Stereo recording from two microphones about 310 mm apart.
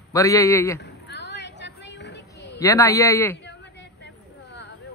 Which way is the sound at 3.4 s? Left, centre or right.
Left.